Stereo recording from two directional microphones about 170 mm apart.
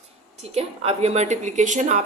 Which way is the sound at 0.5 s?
35° right (ahead or behind).